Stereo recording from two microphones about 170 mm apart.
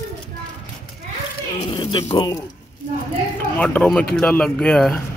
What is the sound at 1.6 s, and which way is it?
Speech, 30° left (ahead or behind).